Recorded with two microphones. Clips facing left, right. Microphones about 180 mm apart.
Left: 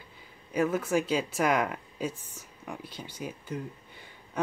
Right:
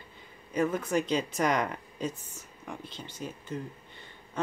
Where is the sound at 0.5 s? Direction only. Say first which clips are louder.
Left 1 dB; 10° left (ahead or behind).